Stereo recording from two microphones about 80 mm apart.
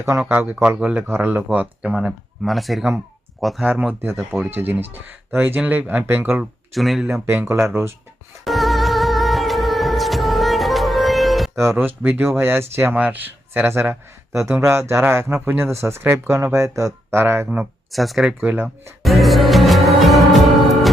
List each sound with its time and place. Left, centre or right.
0.3 s speech: right
1.5 s speech: centre
2.0 s speech: centre
3.7 s speech: centre
6.7 s speech: centre
7.1 s speech: right
8.4 s music: centre
11.8 s speech: right
17.1 s speech: right
17.9 s speech: centre
18.4 s speech: right
19.0 s music: centre